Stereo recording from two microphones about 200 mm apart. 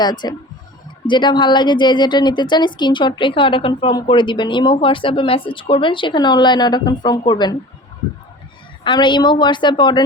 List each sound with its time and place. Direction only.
0.0 s a woman's voice: 20° left (ahead or behind)
8.8 s a woman's voice: 25° left (ahead or behind)